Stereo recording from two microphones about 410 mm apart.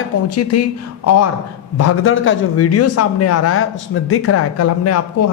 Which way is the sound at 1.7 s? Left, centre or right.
Left.